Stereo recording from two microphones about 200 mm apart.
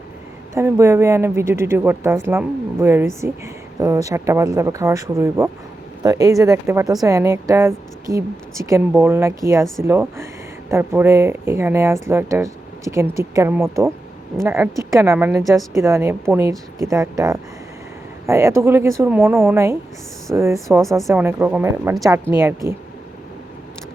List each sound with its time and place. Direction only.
0.5 s a woman's voice: 15° right (ahead or behind)